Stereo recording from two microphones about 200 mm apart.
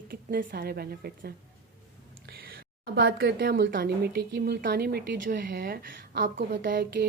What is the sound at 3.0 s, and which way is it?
Speech, 55° right (ahead or behind).